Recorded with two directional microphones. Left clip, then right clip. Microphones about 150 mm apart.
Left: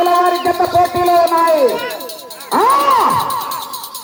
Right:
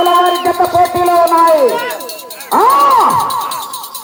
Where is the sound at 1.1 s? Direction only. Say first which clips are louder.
Right 3 dB; 20° right (ahead or behind).